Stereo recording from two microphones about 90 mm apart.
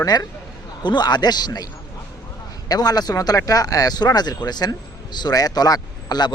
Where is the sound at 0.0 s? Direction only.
45° left (ahead or behind).